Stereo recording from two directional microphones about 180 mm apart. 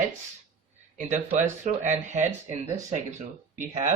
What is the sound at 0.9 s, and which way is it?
Speech, 45° right (ahead or behind).